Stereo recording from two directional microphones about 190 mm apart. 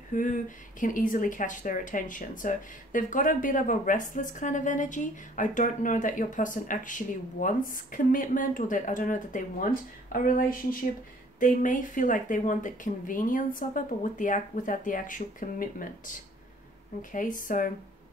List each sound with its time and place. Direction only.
0.1 s speech: 45° left (ahead or behind)